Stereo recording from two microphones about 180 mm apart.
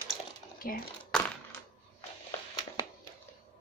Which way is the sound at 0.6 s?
50° left (ahead or behind).